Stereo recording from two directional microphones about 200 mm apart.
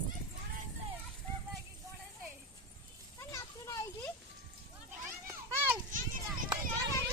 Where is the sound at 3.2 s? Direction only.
15° left (ahead or behind).